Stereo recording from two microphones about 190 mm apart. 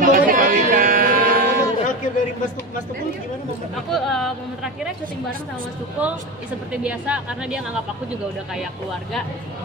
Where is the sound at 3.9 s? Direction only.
Centre (ahead or behind).